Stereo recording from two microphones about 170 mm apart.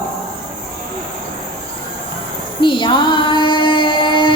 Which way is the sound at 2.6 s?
30° left (ahead or behind).